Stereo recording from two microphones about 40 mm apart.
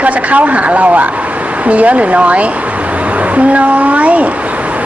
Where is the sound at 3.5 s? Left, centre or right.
Right.